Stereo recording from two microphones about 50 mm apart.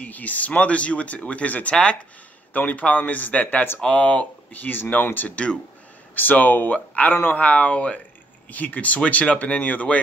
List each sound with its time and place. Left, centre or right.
0.0 s speech: left
5.3 s speech: left
6.1 s speech: left